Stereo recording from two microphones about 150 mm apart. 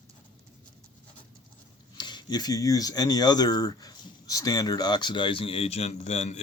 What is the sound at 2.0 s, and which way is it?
Speech, 30° left (ahead or behind).